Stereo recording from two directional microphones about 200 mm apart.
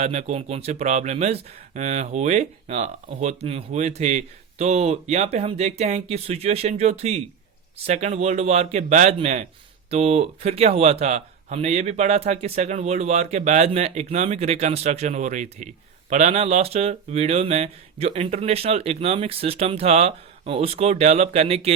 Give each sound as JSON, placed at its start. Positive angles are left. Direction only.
{"t": 0.0, "sound": "speech", "side_deg": -35}